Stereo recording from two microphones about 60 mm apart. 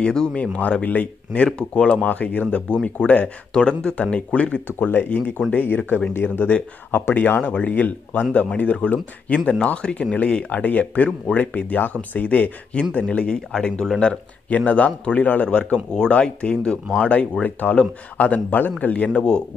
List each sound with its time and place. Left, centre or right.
0.0 s speech: centre
19.0 s speech: centre